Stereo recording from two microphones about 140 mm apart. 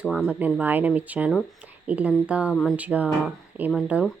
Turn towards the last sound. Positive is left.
turn(degrees=-10)  # may be behind; listen again after turning